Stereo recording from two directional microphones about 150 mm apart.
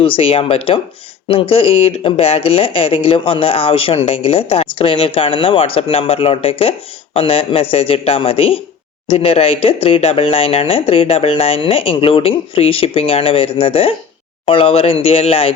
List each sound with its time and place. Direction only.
0.0 s speech: 40° left (ahead or behind)